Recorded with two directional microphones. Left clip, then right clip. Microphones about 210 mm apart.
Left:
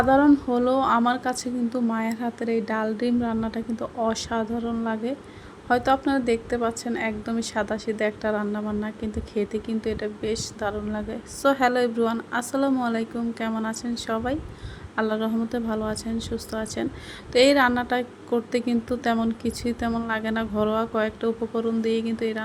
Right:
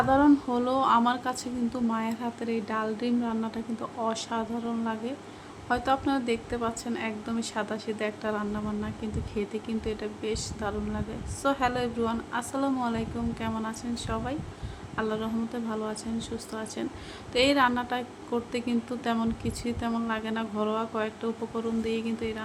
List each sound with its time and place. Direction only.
0.1 s a woman's voice: 15° left (ahead or behind)